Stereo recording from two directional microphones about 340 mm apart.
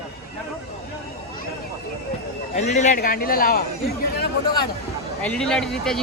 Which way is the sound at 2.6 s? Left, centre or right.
Centre.